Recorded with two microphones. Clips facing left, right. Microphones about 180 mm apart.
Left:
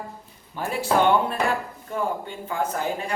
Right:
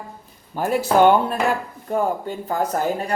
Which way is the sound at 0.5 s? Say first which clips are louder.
Right 7 dB; 45° right (ahead or behind).